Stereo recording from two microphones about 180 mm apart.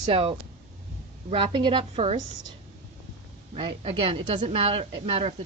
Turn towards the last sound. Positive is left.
turn(degrees=-35)  # may be behind; listen again after turning